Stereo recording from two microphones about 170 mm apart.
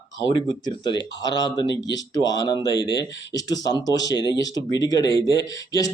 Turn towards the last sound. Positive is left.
turn(degrees=20)  # may be behind; listen again after turning